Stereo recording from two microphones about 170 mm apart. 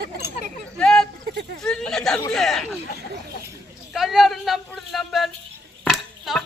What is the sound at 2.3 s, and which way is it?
Speech, centre (ahead or behind).